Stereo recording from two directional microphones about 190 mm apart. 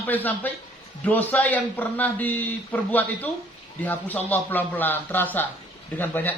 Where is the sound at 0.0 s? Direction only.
10° left (ahead or behind).